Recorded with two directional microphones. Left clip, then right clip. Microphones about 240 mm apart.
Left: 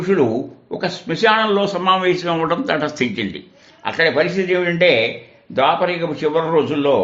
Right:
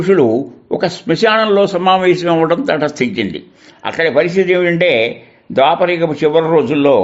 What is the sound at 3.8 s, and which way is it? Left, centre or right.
A man's voice, right.